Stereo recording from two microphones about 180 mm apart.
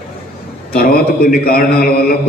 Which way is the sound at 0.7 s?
55° left (ahead or behind).